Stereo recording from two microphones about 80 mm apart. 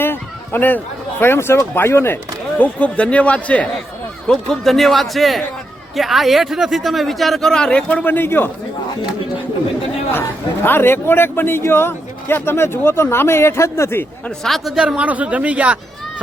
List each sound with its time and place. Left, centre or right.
0.0 s a sound: left
1.2 s speech: left
2.6 s speech: centre
10.1 s a man's voice: left
14.3 s speech: centre
14.8 s a man's voice: centre